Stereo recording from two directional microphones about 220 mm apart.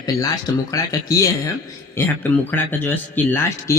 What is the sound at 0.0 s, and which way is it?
Speech, 15° left (ahead or behind).